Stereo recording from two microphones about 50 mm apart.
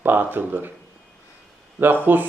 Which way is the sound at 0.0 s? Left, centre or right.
Right.